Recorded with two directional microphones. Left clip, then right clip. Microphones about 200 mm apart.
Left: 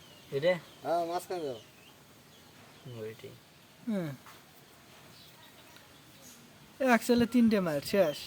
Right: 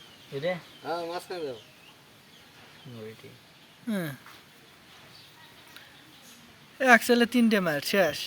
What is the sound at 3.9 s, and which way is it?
Speech, centre (ahead or behind).